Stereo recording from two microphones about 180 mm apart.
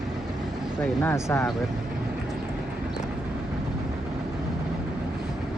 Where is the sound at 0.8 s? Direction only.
10° left (ahead or behind).